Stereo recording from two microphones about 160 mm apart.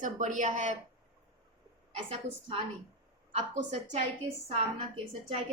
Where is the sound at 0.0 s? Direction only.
50° right (ahead or behind).